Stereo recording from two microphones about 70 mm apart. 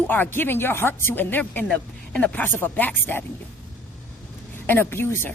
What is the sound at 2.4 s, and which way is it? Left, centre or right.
Speech, left.